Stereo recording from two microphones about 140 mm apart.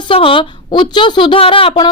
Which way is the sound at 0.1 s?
40° left (ahead or behind).